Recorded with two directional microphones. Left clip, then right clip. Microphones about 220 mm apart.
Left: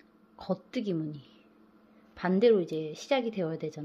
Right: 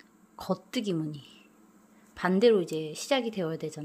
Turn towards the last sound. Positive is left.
turn(degrees=-5)  # may be behind; listen again after turning